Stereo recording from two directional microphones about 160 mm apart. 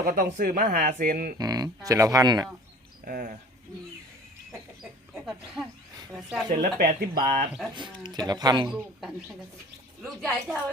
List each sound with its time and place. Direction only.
0.0 s speech: 55° right (ahead or behind)
1.4 s speech: 25° right (ahead or behind)
3.0 s speech: 60° right (ahead or behind)
5.1 s a woman's voice: centre (ahead or behind)
6.6 s speech: 60° right (ahead or behind)
7.9 s speech: 25° right (ahead or behind)
8.7 s a woman's voice: centre (ahead or behind)